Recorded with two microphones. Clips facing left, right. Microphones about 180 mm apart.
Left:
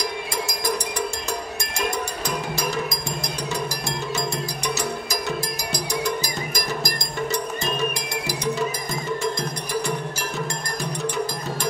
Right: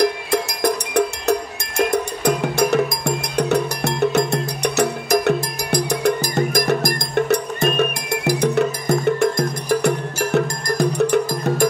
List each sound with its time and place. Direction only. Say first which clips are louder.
0.0 s music: right 9 dB; 65° right (ahead or behind)